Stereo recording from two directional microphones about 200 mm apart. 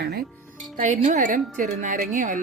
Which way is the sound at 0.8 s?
40° right (ahead or behind).